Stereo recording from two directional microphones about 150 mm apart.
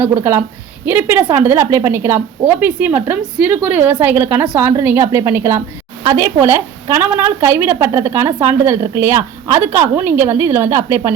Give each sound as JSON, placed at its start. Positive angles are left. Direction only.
{"t": 0.0, "sound": "a woman's voice", "side_deg": -15}